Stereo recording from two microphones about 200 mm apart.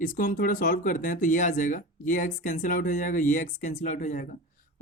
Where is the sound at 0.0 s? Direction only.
40° left (ahead or behind).